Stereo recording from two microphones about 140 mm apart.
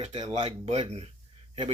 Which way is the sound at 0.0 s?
45° right (ahead or behind).